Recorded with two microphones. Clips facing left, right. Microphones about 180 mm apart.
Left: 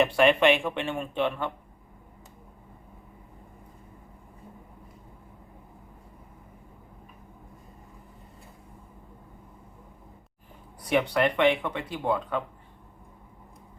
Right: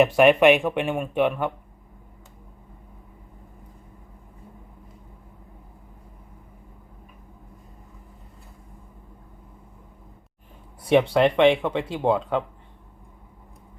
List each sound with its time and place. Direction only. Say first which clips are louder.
0.0 s speech: right 5 dB; 15° right (ahead or behind)
10.8 s speech: right 6 dB; 25° right (ahead or behind)